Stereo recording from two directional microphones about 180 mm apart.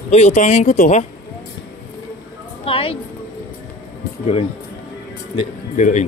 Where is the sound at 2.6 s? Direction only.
30° left (ahead or behind).